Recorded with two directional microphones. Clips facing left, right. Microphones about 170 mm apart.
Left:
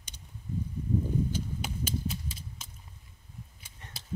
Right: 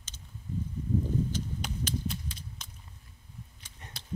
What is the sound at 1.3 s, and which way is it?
Horse, 5° left (ahead or behind).